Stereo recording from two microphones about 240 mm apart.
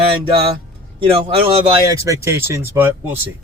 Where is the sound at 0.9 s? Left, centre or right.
Right.